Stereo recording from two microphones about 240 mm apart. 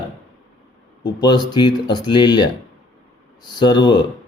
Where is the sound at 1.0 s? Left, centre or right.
Centre.